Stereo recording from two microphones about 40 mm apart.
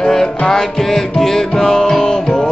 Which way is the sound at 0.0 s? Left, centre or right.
Centre.